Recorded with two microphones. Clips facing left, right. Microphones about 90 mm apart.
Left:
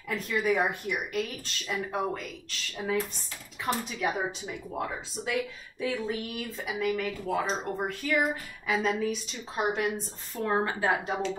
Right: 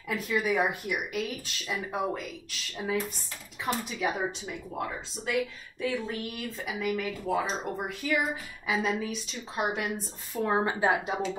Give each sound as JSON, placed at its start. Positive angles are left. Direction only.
{"t": 0.1, "sound": "speech", "side_deg": -10}